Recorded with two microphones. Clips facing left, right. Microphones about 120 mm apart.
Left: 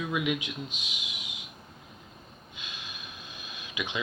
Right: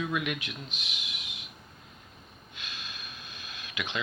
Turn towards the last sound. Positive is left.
turn(degrees=15)  # may be behind; listen again after turning